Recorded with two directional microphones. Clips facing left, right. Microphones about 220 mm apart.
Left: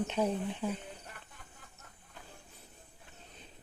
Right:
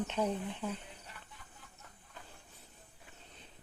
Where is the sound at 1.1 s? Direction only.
50° left (ahead or behind).